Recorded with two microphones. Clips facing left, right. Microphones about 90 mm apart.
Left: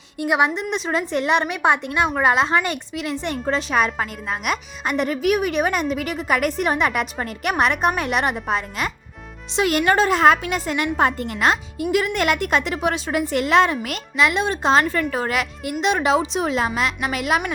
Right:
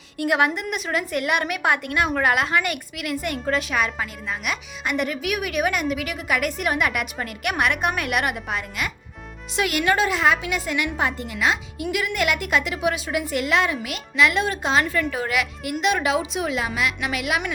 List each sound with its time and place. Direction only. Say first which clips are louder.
0.2 s a woman's voice: left 1 dB; 20° left (ahead or behind)
3.8 s a woman's voice: left 4 dB; 40° left (ahead or behind)
11.8 s a woman's voice: left 4 dB; 35° left (ahead or behind)
14.2 s a woman's voice: left 1 dB; 25° left (ahead or behind)